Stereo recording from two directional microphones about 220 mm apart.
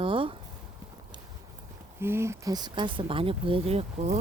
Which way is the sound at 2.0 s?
10° right (ahead or behind).